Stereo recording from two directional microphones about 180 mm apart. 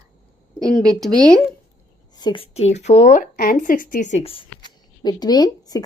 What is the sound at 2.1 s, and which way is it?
A woman's voice, 25° left (ahead or behind).